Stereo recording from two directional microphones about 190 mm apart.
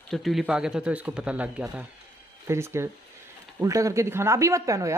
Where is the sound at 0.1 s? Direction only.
Centre (ahead or behind).